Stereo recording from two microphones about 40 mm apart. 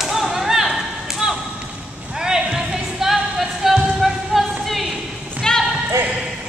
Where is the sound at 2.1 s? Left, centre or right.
Centre.